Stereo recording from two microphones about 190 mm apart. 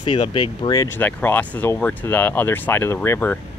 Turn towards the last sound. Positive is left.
turn(degrees=10)  # may be behind; listen again after turning